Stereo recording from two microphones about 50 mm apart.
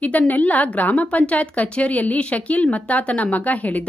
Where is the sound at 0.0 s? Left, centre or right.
Left.